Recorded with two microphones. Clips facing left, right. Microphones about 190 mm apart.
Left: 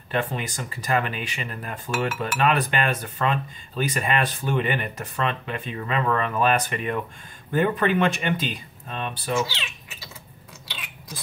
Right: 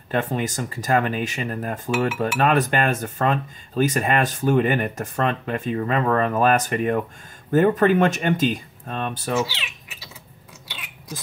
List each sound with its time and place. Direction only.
0.1 s speech: 45° right (ahead or behind)